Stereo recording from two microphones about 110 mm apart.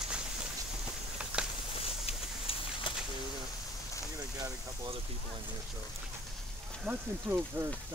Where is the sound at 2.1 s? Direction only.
60° left (ahead or behind).